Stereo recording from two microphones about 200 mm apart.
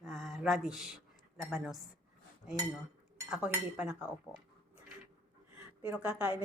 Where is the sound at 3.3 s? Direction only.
5° right (ahead or behind).